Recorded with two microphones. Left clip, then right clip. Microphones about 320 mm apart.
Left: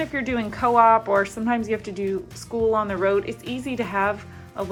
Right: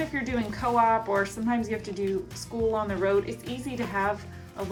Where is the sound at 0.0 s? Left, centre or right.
Centre.